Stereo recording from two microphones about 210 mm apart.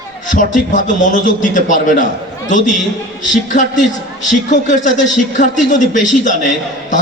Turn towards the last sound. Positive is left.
turn(degrees=35)  # may be behind; listen again after turning